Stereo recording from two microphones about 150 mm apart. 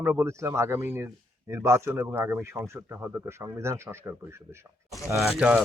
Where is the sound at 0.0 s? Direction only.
15° right (ahead or behind).